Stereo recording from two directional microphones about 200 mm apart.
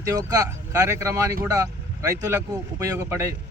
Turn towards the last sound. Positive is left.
turn(degrees=-15)  # may be behind; listen again after turning